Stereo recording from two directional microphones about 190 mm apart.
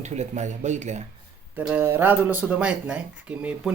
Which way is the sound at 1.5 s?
10° right (ahead or behind).